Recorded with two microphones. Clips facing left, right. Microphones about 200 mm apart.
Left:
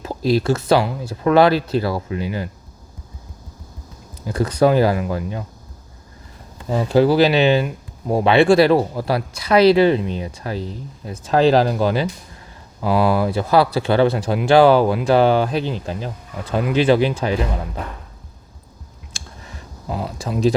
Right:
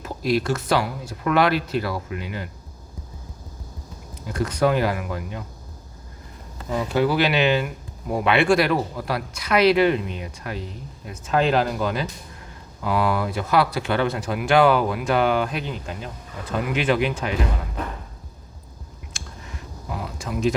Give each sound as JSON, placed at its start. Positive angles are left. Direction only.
{"t": 0.0, "sound": "speech", "side_deg": 30}
{"t": 4.4, "sound": "speech", "side_deg": 35}
{"t": 6.7, "sound": "speech", "side_deg": 30}
{"t": 19.9, "sound": "a sound", "side_deg": 30}